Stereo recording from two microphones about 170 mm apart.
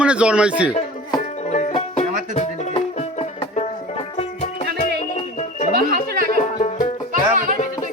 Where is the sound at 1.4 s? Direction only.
45° left (ahead or behind).